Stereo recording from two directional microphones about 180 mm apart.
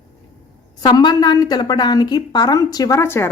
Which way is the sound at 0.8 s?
25° left (ahead or behind).